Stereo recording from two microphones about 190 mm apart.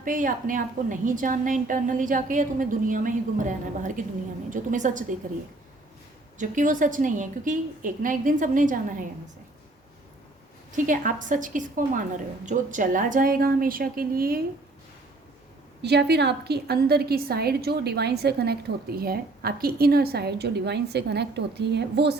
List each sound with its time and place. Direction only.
0.0 s a woman's voice: 45° right (ahead or behind)
6.4 s a woman's voice: 40° right (ahead or behind)
10.7 s a woman's voice: 45° right (ahead or behind)
15.8 s a woman's voice: 60° right (ahead or behind)